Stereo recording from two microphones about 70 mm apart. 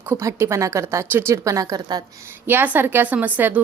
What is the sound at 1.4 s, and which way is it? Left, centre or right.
Speech, right.